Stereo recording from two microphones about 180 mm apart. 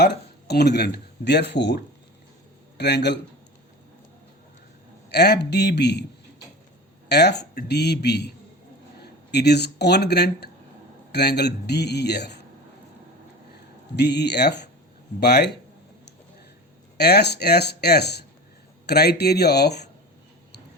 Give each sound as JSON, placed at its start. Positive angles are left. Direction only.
{"t": 0.0, "sound": "a man's voice", "side_deg": 65}
{"t": 5.1, "sound": "a man's voice", "side_deg": 65}
{"t": 7.1, "sound": "a man's voice", "side_deg": 65}
{"t": 9.3, "sound": "a man's voice", "side_deg": 65}
{"t": 13.9, "sound": "a man's voice", "side_deg": 70}
{"t": 17.0, "sound": "speech", "side_deg": 65}